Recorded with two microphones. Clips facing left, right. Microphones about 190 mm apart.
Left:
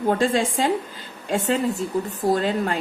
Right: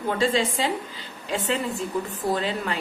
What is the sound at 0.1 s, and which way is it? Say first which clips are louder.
A woman's voice: left 2 dB; 50° left (ahead or behind).